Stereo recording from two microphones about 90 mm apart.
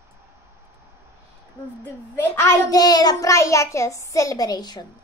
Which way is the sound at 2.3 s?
45° left (ahead or behind).